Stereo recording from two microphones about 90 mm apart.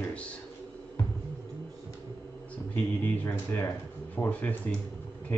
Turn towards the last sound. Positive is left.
turn(degrees=20)  # may be behind; listen again after turning